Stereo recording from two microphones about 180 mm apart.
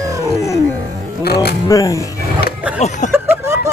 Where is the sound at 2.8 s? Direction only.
40° left (ahead or behind).